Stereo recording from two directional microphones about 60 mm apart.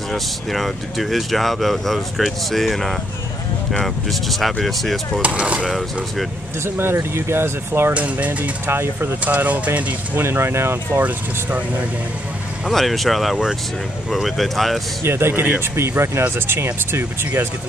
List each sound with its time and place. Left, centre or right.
0.1 s speech: centre
5.2 s speech: right
6.6 s speech: right
7.9 s speech: right
8.6 s speech: right
9.2 s speech: right
10.2 s speech: right
11.0 s speech: right
12.6 s speech: centre
15.0 s speech: right